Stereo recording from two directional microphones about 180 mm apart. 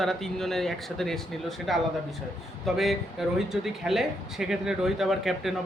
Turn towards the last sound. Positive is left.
turn(degrees=0)  # may be behind; listen again after turning